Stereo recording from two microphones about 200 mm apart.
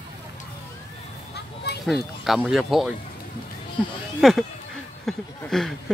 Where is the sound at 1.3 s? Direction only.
55° left (ahead or behind).